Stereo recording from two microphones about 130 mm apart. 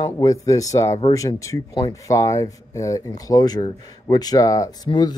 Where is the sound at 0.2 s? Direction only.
25° left (ahead or behind).